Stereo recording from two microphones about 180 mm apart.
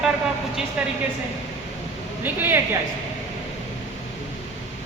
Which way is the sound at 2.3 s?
10° right (ahead or behind).